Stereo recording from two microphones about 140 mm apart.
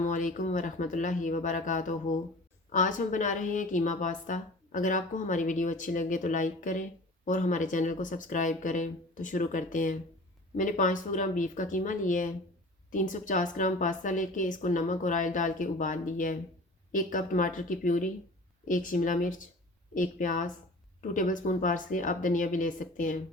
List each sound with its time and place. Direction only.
0.0 s a woman's voice: 65° left (ahead or behind)